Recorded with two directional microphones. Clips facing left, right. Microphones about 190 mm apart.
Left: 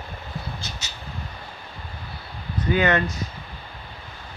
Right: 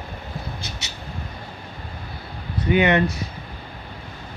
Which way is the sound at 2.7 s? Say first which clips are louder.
Right 3 dB; 20° right (ahead or behind).